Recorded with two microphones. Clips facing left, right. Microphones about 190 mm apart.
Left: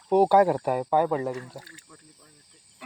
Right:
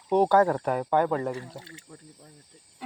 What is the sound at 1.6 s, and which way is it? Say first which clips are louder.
Speech: right 2 dB; 25° right (ahead or behind).